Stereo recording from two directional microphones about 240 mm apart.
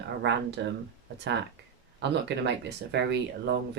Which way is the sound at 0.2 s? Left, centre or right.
Right.